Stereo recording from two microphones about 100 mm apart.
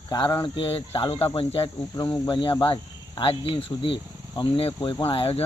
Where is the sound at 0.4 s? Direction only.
60° left (ahead or behind).